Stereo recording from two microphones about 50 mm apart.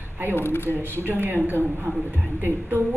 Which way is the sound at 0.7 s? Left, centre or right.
Right.